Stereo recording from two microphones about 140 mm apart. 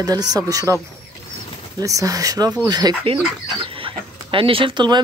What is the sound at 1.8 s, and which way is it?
Speech, 25° right (ahead or behind).